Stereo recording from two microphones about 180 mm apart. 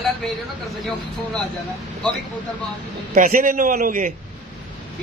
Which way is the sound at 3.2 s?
50° right (ahead or behind).